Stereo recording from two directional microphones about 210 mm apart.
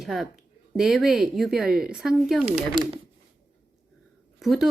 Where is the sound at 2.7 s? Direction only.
25° right (ahead or behind).